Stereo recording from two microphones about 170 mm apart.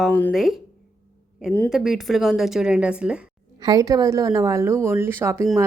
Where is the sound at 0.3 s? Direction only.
Centre (ahead or behind).